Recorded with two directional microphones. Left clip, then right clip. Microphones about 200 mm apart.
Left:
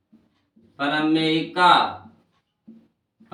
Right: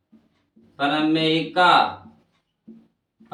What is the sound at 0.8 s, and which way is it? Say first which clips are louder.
Speech: right 1 dB; 15° right (ahead or behind).